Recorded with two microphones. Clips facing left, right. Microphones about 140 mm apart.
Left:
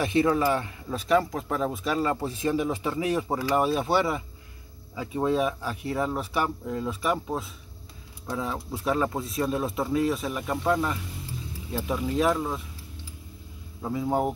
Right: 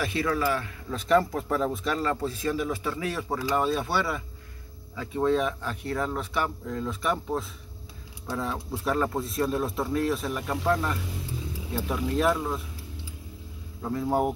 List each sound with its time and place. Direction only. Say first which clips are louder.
0.0 s speech: left 4 dB; 25° left (ahead or behind)
0.9 s speech: right 1 dB; 5° left (ahead or behind)
13.8 s speech: even; 5° left (ahead or behind)